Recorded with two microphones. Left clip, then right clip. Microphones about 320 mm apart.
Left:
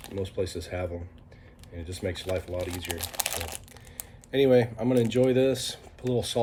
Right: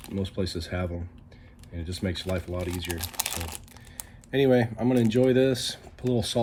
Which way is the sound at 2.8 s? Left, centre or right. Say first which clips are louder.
Even; centre.